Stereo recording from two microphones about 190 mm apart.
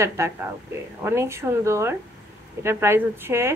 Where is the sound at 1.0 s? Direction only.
15° right (ahead or behind).